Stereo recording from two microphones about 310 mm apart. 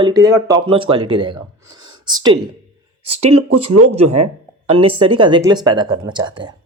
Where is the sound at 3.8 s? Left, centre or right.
Centre.